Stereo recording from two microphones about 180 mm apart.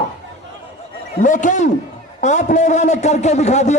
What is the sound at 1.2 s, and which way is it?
A man's voice, 45° left (ahead or behind).